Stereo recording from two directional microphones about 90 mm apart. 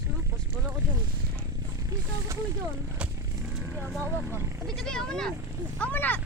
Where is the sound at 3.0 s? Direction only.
15° right (ahead or behind).